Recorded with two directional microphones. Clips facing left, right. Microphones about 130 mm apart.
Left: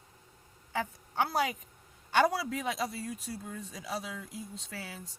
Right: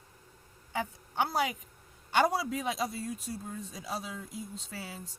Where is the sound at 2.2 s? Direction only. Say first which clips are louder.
Even; 25° right (ahead or behind).